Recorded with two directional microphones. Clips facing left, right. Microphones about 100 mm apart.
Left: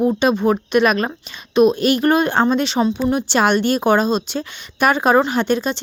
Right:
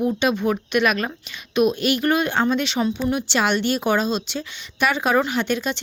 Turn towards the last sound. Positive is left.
turn(degrees=35)  # may be behind; listen again after turning